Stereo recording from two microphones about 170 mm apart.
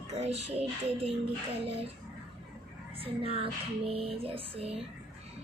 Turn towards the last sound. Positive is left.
turn(degrees=-35)  # may be behind; listen again after turning